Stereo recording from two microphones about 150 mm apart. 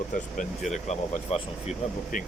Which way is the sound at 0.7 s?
50° left (ahead or behind).